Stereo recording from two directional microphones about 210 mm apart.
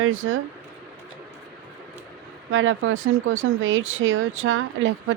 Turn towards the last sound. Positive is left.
turn(degrees=-65)  # may be behind; listen again after turning